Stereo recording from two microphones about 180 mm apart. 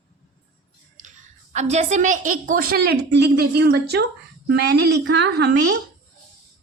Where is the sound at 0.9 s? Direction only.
45° right (ahead or behind); by 5.8 s 70° right (ahead or behind).